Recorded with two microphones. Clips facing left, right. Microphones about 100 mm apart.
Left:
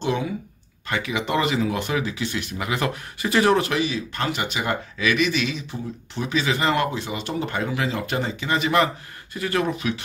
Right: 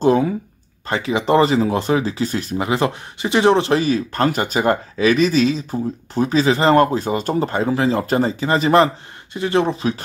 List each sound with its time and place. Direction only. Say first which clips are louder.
0.0 s speech: right 9 dB; 40° right (ahead or behind)
3.8 s speech: right 8 dB; 40° right (ahead or behind)